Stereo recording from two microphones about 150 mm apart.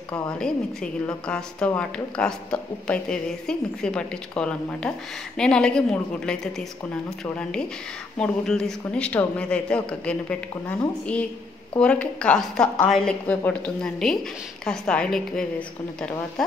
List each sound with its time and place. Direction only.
0.1 s a man's voice: 5° left (ahead or behind)
8.2 s a man's voice: 5° left (ahead or behind)
11.8 s a woman's voice: 5° left (ahead or behind)